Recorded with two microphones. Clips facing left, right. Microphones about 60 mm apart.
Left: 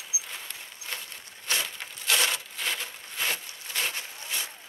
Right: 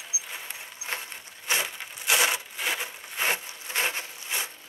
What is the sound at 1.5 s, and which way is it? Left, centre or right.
Wood, centre.